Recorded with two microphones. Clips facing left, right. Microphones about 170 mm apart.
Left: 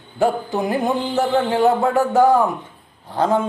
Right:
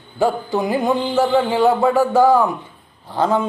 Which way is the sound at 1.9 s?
20° left (ahead or behind).